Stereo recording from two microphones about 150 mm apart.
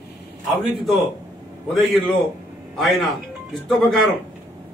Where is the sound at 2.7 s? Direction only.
Centre (ahead or behind).